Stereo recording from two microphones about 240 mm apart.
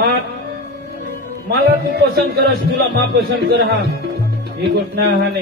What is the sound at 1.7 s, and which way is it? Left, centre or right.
Speech, right.